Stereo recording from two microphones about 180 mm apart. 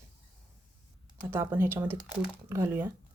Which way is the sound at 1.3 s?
15° right (ahead or behind).